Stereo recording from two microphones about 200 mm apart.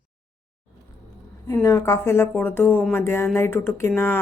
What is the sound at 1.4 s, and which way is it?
Speech, 15° left (ahead or behind).